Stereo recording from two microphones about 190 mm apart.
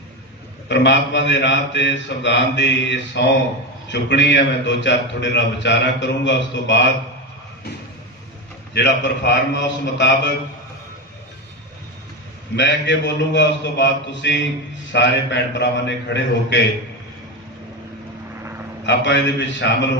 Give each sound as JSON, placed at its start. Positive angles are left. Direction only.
{"t": 0.7, "sound": "a man's voice", "side_deg": 65}
{"t": 8.7, "sound": "a man's voice", "side_deg": 65}
{"t": 12.5, "sound": "a man's voice", "side_deg": 70}
{"t": 18.9, "sound": "a man's voice", "side_deg": 70}